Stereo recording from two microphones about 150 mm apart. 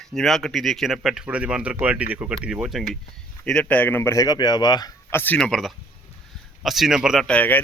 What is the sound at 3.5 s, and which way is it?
Speech, 10° left (ahead or behind).